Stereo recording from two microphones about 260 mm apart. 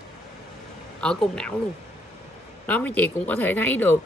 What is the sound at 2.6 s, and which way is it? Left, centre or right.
Speech, centre.